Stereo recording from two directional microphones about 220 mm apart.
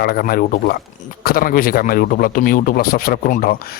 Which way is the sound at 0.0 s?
45° left (ahead or behind).